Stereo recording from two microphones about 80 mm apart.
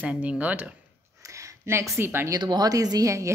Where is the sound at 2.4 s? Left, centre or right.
Right.